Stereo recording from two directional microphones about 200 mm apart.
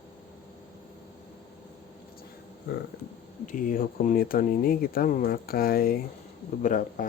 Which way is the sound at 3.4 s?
40° left (ahead or behind).